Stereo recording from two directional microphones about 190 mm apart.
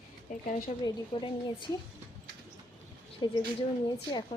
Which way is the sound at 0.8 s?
25° left (ahead or behind).